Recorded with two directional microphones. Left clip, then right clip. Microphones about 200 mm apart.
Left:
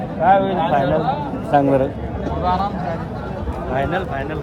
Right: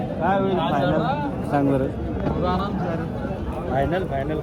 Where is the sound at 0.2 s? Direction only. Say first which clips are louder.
Left 7 dB; 45° left (ahead or behind).